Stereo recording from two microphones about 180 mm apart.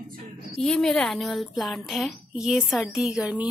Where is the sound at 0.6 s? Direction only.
Centre (ahead or behind).